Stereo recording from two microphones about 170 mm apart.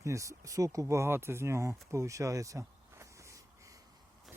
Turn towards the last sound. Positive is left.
turn(degrees=-20)  # may be behind; listen again after turning